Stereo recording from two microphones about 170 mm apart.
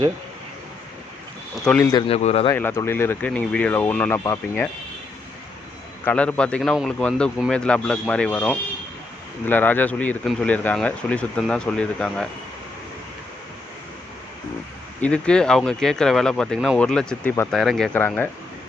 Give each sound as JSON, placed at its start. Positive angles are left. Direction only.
{"t": 1.6, "sound": "speech", "side_deg": 5}
{"t": 1.9, "sound": "speech", "side_deg": 25}
{"t": 2.1, "sound": "speech", "side_deg": 35}
{"t": 2.5, "sound": "speech", "side_deg": 15}
{"t": 6.1, "sound": "speech", "side_deg": 5}
{"t": 15.0, "sound": "speech", "side_deg": 5}
{"t": 17.9, "sound": "speech", "side_deg": 10}